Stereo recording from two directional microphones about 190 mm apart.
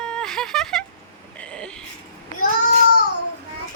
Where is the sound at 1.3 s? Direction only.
5° left (ahead or behind).